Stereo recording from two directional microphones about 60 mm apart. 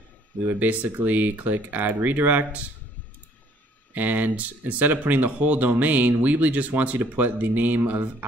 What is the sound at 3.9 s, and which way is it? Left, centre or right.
Speech, right.